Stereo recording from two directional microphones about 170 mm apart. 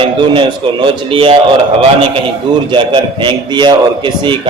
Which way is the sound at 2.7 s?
30° right (ahead or behind).